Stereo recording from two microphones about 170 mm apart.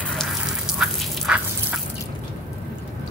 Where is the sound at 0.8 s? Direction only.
5° right (ahead or behind).